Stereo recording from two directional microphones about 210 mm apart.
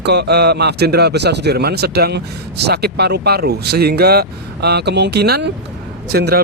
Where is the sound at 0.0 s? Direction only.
55° right (ahead or behind).